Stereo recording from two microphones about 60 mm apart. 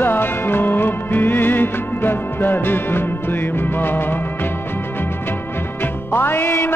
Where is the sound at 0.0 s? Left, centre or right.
Left.